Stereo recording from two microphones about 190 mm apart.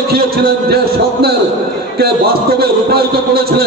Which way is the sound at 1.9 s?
55° right (ahead or behind).